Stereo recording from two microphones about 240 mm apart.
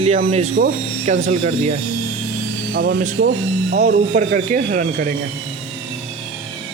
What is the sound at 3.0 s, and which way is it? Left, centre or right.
Speech, right.